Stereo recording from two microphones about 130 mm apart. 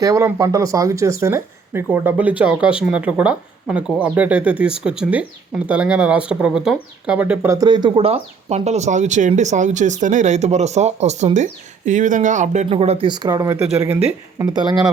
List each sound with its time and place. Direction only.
0.0 s speech: 20° right (ahead or behind)
7.5 s speech: 30° right (ahead or behind); by 12.6 s 70° right (ahead or behind)
12.6 s speech: 50° right (ahead or behind)
13.1 s speech: 30° right (ahead or behind)
13.8 s speech: 10° right (ahead or behind)
14.3 s speech: 35° right (ahead or behind)